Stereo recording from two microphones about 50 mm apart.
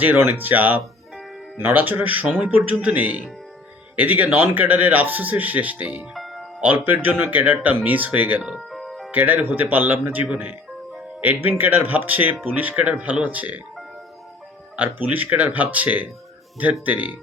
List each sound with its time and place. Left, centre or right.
0.0 s speech: right
6.1 s music: centre
6.6 s speech: right
8.4 s speech: centre
8.7 s music: centre
9.1 s speech: right
14.8 s speech: right